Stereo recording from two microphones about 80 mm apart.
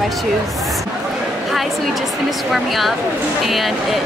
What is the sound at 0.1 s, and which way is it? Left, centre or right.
A woman's voice, centre.